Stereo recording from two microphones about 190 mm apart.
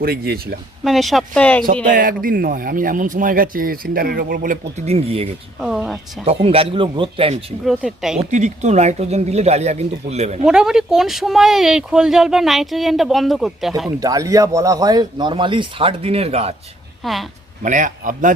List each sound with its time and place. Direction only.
0.0 s speech: 55° right (ahead or behind)
0.9 s speech: centre (ahead or behind)
1.9 s speech: 45° right (ahead or behind)
4.9 s speech: 30° right (ahead or behind)
5.5 s speech: 5° right (ahead or behind)
6.2 s speech: 30° right (ahead or behind)
7.6 s speech: centre (ahead or behind)
8.2 s speech: 40° right (ahead or behind)
10.4 s speech: 5° right (ahead or behind)
14.0 s speech: 20° right (ahead or behind)
17.0 s speech: centre (ahead or behind)
17.6 s speech: 40° right (ahead or behind)